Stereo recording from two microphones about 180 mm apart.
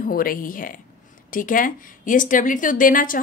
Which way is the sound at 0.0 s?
50° left (ahead or behind).